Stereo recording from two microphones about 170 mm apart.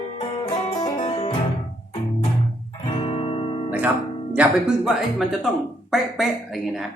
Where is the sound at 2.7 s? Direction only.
30° left (ahead or behind).